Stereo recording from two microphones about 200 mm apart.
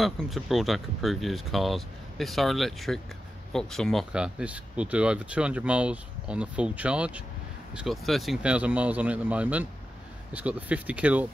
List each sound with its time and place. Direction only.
0.0 s a man's voice: centre (ahead or behind)